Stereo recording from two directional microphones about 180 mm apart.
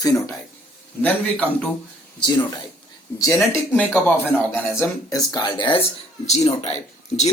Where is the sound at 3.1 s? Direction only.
15° left (ahead or behind).